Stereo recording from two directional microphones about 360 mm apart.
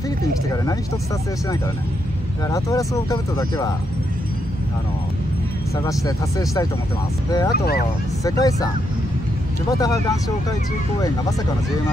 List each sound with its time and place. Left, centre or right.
2.5 s speech: centre
5.9 s speech: centre
7.5 s speech: left
8.2 s speech: centre
9.7 s speech: centre